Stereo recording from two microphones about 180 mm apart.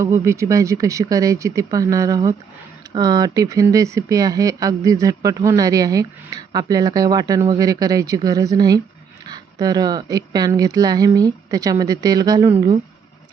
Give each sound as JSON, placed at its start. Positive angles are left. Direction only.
{"t": 0.0, "sound": "speech", "side_deg": -15}